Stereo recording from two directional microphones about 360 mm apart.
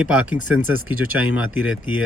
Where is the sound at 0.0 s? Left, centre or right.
Centre.